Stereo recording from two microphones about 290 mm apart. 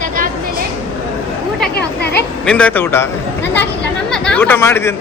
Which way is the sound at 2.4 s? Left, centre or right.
Centre.